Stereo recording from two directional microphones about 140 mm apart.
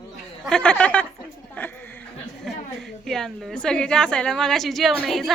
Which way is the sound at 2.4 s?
Centre (ahead or behind).